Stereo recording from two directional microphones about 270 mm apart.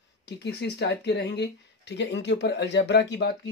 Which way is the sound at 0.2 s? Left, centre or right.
Left.